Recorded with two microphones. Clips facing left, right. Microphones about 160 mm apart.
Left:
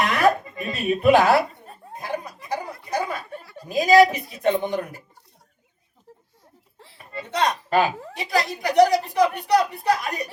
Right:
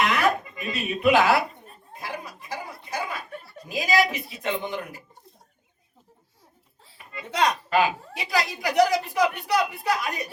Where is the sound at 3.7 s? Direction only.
40° left (ahead or behind).